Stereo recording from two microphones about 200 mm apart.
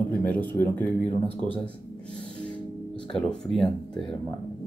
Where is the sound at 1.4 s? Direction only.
25° right (ahead or behind).